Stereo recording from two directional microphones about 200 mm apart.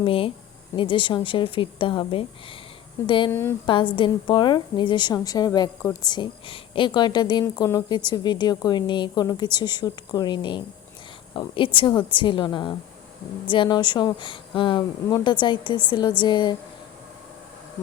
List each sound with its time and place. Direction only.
0.0 s a woman's voice: 25° left (ahead or behind)